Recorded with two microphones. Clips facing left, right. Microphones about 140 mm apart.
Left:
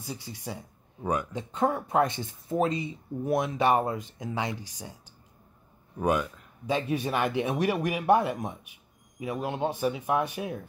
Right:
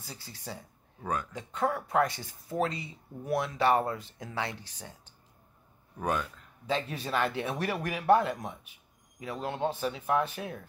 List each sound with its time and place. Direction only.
0.0 s speech: 15° left (ahead or behind)
5.9 s speech: 10° left (ahead or behind)